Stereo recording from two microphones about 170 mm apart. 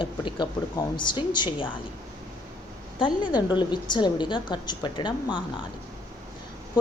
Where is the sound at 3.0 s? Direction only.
25° left (ahead or behind).